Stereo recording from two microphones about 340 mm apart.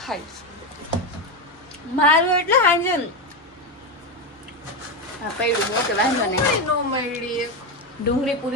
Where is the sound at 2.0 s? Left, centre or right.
Centre.